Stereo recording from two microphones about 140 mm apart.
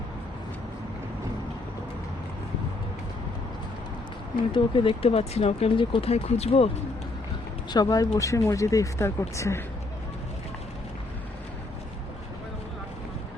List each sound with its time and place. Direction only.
4.5 s speech: 35° left (ahead or behind)
7.7 s speech: 30° left (ahead or behind)